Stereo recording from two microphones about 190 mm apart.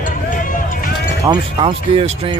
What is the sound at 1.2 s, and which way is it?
Speech, 30° right (ahead or behind).